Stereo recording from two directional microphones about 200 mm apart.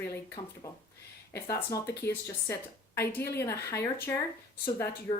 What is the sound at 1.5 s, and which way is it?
Speech, 15° left (ahead or behind).